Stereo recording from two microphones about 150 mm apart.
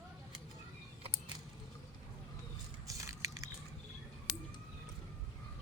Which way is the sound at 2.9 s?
20° right (ahead or behind).